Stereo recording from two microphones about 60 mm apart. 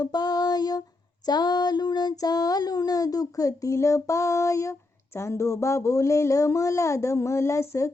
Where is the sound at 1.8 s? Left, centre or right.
Left.